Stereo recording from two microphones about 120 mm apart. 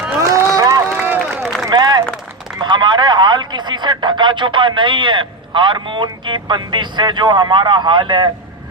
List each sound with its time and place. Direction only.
0.2 s run: 25° right (ahead or behind)
0.9 s run: 15° right (ahead or behind)
1.3 s run: centre (ahead or behind)
1.6 s a sound: 35° right (ahead or behind)
2.6 s speech: 40° right (ahead or behind)